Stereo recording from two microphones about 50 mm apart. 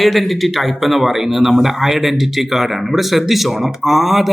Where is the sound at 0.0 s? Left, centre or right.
Centre.